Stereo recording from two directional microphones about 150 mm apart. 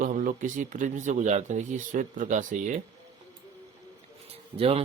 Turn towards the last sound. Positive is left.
turn(degrees=-40)  # may be behind; listen again after turning